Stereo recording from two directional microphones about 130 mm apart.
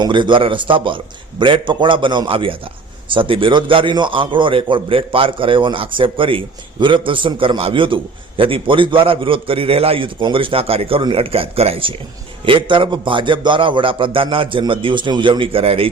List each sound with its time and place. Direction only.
0.0 s a man's voice: 40° right (ahead or behind)